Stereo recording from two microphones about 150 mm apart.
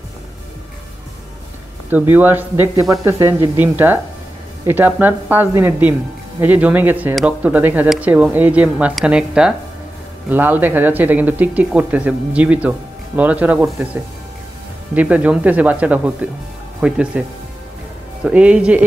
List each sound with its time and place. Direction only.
1.9 s speech: 10° right (ahead or behind)
15.0 s speech: 10° right (ahead or behind)
18.2 s speech: 5° right (ahead or behind)